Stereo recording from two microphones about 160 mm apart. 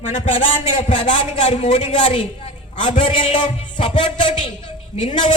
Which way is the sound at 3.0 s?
30° left (ahead or behind).